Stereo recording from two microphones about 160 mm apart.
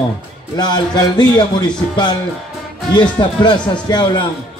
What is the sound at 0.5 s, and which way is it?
A man's voice, 25° left (ahead or behind).